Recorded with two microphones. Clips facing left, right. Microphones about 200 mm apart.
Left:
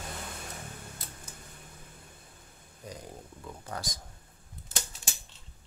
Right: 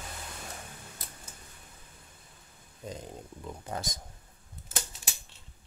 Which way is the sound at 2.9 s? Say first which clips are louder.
Right 3 dB; 20° right (ahead or behind).